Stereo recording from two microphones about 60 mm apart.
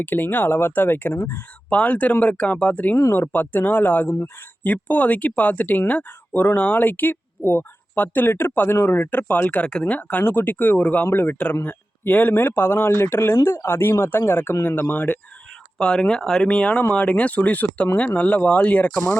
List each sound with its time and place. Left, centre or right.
0.0 s speech: left
1.7 s speech: left
3.0 s speech: left
13.3 s speech: left
13.7 s speech: left
15.8 s speech: centre